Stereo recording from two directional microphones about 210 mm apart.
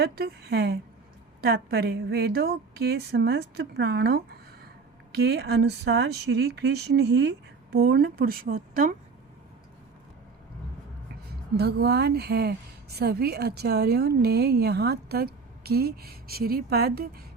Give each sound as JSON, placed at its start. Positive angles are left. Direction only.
{"t": 0.0, "sound": "speech", "side_deg": -50}
{"t": 11.3, "sound": "speech", "side_deg": -50}